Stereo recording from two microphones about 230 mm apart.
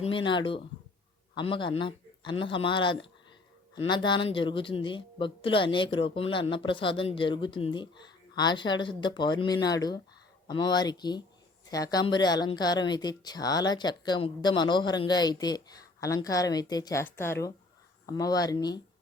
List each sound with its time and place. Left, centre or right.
0.0 s speech: left